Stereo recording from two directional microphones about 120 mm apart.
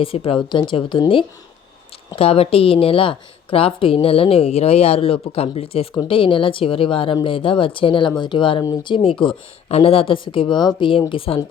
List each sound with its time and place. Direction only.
0.0 s a woman's voice: 50° left (ahead or behind)